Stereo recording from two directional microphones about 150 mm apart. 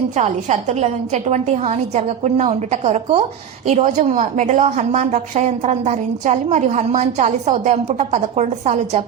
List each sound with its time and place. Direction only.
0.2 s a woman's voice: 50° right (ahead or behind)